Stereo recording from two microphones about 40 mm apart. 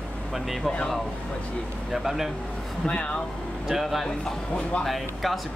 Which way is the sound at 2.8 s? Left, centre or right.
Left.